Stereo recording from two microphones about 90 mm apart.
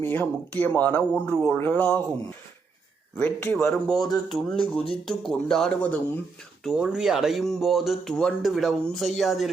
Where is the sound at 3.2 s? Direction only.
25° left (ahead or behind).